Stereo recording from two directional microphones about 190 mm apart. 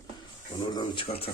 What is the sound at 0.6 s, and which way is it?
Speech, 20° left (ahead or behind).